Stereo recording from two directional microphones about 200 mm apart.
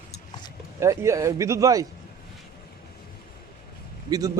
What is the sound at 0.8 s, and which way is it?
A man's voice, 15° right (ahead or behind).